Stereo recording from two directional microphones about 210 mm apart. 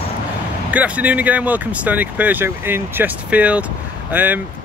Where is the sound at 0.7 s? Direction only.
5° right (ahead or behind).